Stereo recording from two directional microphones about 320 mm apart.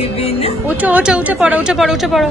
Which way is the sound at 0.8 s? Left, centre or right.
Centre.